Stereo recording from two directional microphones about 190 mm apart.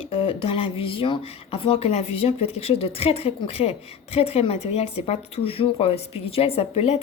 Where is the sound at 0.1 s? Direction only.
30° left (ahead or behind).